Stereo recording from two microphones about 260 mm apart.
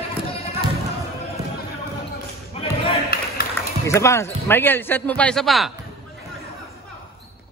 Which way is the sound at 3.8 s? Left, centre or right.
Centre.